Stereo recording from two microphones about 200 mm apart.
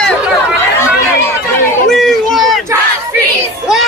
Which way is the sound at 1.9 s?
Centre (ahead or behind).